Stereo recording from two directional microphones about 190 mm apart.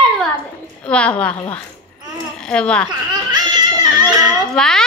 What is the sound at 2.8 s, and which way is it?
Giggle, 20° right (ahead or behind).